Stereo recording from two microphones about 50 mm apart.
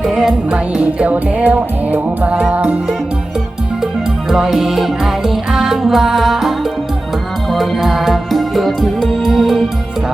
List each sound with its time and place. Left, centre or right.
0.0 s music: centre
0.5 s music: right
4.3 s music: centre
7.5 s music: centre